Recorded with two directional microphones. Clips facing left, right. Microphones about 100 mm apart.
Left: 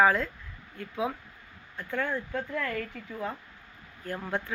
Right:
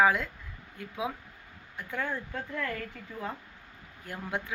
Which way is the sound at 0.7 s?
15° right (ahead or behind).